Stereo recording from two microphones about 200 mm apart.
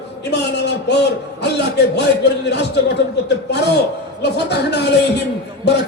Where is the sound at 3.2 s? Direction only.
55° left (ahead or behind).